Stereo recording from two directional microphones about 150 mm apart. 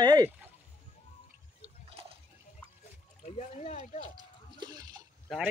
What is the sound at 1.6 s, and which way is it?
Liquid, 40° right (ahead or behind).